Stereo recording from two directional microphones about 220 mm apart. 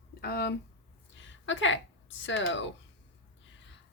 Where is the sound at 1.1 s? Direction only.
55° left (ahead or behind).